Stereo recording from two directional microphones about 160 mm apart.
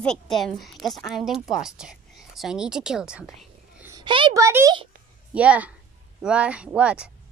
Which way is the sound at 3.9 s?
30° right (ahead or behind).